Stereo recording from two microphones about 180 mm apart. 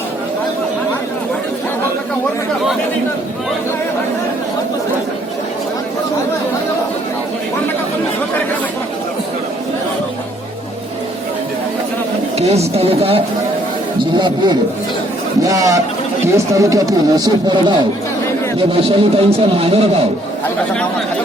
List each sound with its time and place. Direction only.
12.4 s a man's voice: 35° right (ahead or behind)